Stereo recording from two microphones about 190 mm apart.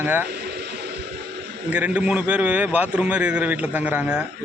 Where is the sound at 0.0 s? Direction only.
10° right (ahead or behind).